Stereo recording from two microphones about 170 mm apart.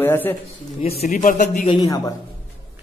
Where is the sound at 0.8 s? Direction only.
45° left (ahead or behind).